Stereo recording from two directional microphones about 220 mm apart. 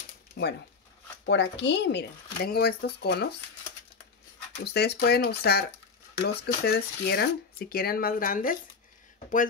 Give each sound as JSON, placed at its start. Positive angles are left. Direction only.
{"t": 1.2, "sound": "speech", "side_deg": 55}
{"t": 4.6, "sound": "speech", "side_deg": 50}